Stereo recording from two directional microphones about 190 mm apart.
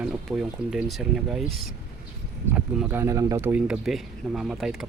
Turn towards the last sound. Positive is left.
turn(degrees=0)  # may be behind; listen again after turning